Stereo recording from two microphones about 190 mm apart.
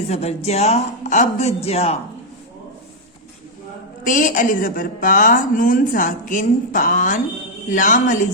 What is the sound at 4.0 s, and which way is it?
A woman's voice, 45° left (ahead or behind).